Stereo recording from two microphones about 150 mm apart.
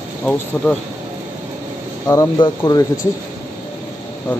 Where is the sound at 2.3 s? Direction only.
25° left (ahead or behind).